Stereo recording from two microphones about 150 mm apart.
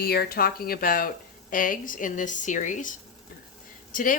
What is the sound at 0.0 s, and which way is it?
Speech, 90° left.